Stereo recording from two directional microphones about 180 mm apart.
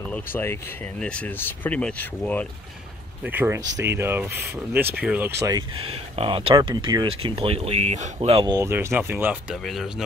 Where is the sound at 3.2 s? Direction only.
10° right (ahead or behind).